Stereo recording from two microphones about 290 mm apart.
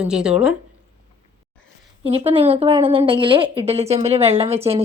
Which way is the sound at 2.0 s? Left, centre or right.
Right.